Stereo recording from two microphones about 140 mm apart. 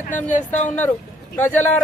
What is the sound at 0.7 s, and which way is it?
Speech, 10° left (ahead or behind).